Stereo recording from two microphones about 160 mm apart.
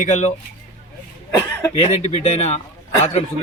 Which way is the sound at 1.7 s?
40° left (ahead or behind).